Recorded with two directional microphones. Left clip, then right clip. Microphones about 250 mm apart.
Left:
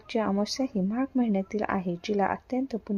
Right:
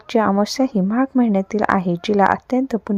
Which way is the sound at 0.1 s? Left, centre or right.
Right.